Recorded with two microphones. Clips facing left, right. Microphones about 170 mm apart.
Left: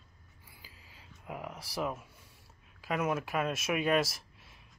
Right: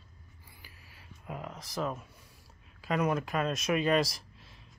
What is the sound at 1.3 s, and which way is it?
A man's voice, 15° left (ahead or behind).